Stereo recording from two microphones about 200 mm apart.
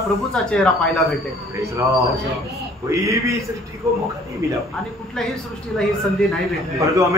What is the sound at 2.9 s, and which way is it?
Speech, 15° right (ahead or behind).